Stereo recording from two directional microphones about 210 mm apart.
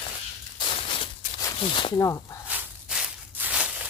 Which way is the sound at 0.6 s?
25° left (ahead or behind).